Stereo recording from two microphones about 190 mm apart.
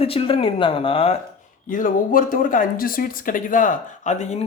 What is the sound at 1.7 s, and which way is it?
Speech, 45° left (ahead or behind).